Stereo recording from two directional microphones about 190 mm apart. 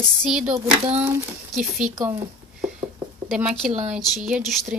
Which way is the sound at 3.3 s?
5° right (ahead or behind).